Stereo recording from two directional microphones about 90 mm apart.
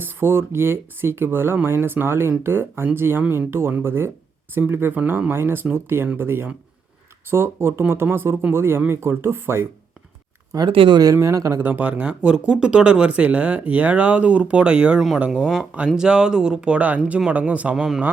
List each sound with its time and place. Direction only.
0.0 s speech: 25° right (ahead or behind)
10.7 s speech: 75° right (ahead or behind)
10.9 s speech: 35° right (ahead or behind)
11.6 s speech: 15° right (ahead or behind)